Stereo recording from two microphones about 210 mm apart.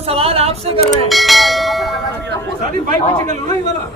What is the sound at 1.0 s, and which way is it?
Speech, centre (ahead or behind).